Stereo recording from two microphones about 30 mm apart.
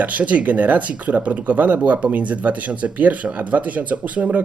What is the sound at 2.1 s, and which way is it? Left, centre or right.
Speech, right.